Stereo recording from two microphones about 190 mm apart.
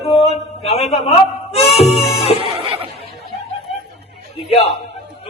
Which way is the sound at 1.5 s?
30° left (ahead or behind).